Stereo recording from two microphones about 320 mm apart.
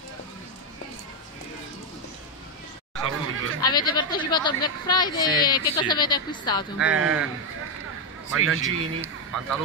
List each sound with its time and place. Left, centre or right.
3.0 s honk: right
3.6 s speech: centre
6.8 s speech: centre
8.5 s speech: centre